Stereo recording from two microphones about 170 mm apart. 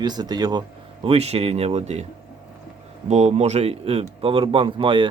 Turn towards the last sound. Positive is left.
turn(degrees=-30)  # may be behind; listen again after turning